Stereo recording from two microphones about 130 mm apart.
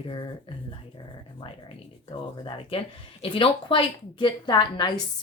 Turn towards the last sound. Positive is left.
turn(degrees=35)  # may be behind; listen again after turning